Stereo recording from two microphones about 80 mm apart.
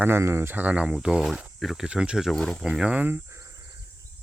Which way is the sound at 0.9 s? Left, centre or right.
Centre.